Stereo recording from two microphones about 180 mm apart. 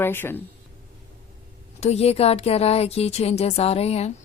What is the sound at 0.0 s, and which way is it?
Speech, 10° left (ahead or behind).